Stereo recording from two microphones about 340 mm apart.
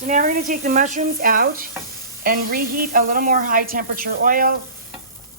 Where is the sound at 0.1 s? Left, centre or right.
Right.